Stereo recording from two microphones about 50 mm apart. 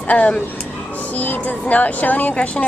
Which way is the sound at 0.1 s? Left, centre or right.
Left.